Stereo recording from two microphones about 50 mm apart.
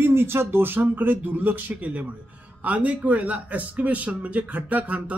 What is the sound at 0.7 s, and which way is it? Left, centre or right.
Speech, right.